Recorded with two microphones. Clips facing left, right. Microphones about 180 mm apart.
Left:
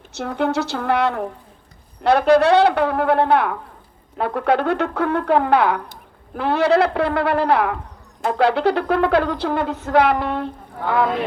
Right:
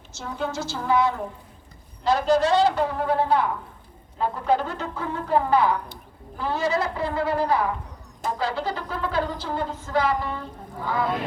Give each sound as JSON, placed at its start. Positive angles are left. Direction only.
{"t": 0.1, "sound": "a woman's voice", "side_deg": 65}